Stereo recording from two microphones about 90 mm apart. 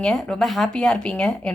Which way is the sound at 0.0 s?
10° left (ahead or behind).